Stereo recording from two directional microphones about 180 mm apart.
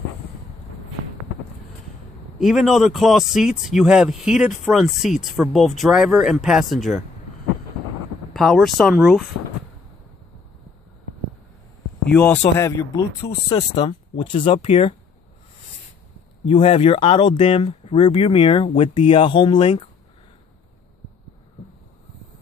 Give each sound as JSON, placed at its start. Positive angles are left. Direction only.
{"t": 2.3, "sound": "a man's voice", "side_deg": 0}
{"t": 8.3, "sound": "a man's voice", "side_deg": 0}
{"t": 12.1, "sound": "speech", "side_deg": 10}
{"t": 13.5, "sound": "speech", "side_deg": 30}
{"t": 16.4, "sound": "speech", "side_deg": 30}